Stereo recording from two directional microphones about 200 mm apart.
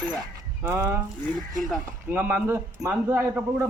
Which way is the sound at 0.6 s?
15° right (ahead or behind).